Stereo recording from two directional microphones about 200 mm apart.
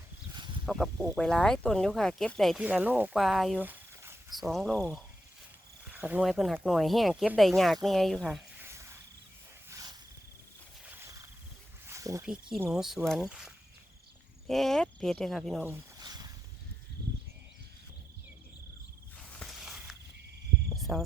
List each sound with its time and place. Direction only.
0.6 s speech: centre (ahead or behind)
4.4 s speech: centre (ahead or behind)
5.8 s speech: 5° right (ahead or behind)
9.6 s wild animals: 15° right (ahead or behind)
10.8 s a sound: 15° right (ahead or behind)
12.5 s speech: centre (ahead or behind)
15.6 s a sound: 15° right (ahead or behind)
19.4 s walk: centre (ahead or behind)
20.9 s speech: 5° right (ahead or behind)